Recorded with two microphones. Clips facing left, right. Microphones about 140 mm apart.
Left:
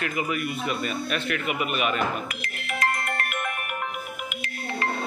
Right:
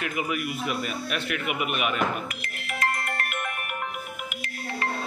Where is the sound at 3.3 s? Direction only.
90° left.